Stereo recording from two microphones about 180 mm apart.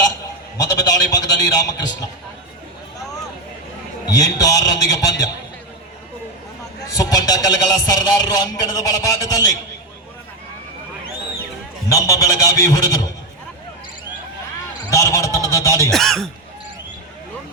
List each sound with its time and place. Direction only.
0.5 s a sound: 20° left (ahead or behind)
4.0 s a man's voice: 20° left (ahead or behind)
6.9 s a man's voice: 20° left (ahead or behind)
11.9 s a man's voice: 20° left (ahead or behind)
14.8 s a man's voice: 20° left (ahead or behind)
15.9 s speech: centre (ahead or behind)